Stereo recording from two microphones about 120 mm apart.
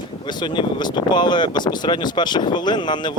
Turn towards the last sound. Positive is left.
turn(degrees=40)  # may be behind; listen again after turning